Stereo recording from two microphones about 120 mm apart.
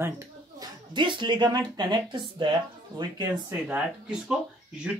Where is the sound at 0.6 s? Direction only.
40° right (ahead or behind).